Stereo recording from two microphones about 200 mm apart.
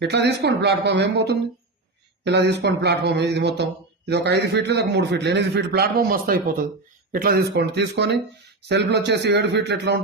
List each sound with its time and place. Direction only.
0.0 s a man's voice: 55° right (ahead or behind)